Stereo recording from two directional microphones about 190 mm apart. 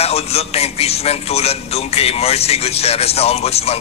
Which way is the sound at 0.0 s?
30° left (ahead or behind).